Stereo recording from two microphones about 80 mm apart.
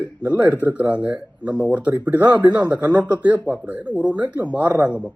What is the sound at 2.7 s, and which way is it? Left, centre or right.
Speech, right.